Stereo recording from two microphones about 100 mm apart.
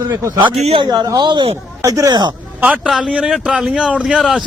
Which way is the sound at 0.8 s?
45° right (ahead or behind).